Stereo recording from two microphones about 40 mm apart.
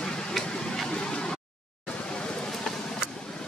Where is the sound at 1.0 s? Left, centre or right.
Left.